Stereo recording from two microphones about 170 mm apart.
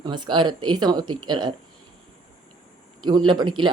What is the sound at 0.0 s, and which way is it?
Speech, 25° right (ahead or behind).